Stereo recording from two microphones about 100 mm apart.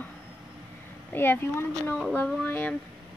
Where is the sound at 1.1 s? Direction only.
20° left (ahead or behind).